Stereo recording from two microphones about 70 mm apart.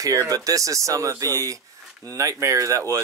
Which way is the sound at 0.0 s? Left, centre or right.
Right.